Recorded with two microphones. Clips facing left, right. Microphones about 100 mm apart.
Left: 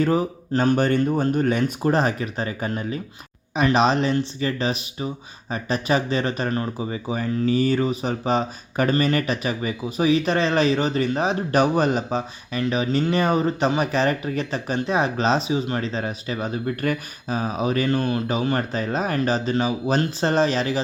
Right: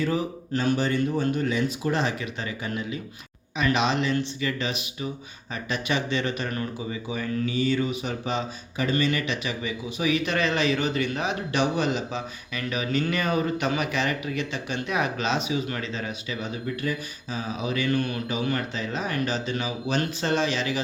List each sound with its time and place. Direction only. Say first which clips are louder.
0.0 s speech: left 5 dB; 40° left (ahead or behind)